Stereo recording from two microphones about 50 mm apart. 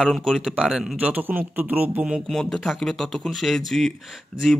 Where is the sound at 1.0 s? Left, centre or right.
Right.